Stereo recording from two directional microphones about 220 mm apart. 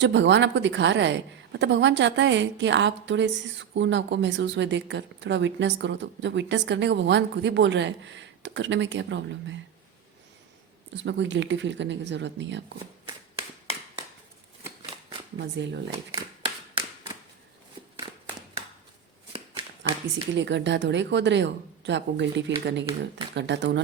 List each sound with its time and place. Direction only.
0.0 s a woman's voice: 55° right (ahead or behind)
10.9 s a woman's voice: 55° right (ahead or behind)
15.4 s speech: 50° right (ahead or behind)
16.1 s a sound: 20° right (ahead or behind)
19.8 s speech: 55° right (ahead or behind)